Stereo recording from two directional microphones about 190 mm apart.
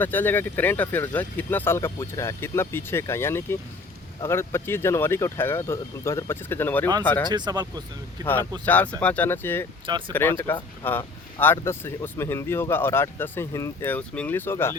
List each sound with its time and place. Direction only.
0.0 s speech: 10° left (ahead or behind)
7.3 s speech: 20° right (ahead or behind)
8.2 s speech: 10° left (ahead or behind)